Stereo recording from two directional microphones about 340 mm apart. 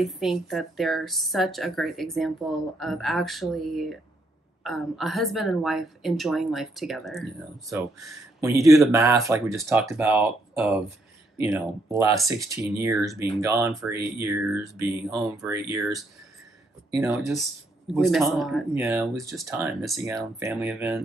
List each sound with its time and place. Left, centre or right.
0.0 s speech: centre